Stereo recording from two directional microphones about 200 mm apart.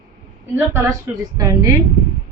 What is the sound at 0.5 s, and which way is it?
A woman's voice, 10° right (ahead or behind).